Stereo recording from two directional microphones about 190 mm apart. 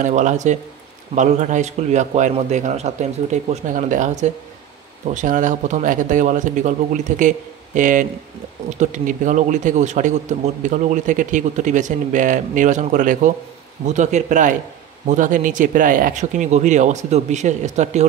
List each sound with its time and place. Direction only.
0.0 s a man's voice: 40° right (ahead or behind)